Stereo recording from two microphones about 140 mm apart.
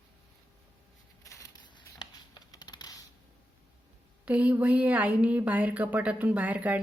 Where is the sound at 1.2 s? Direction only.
25° left (ahead or behind).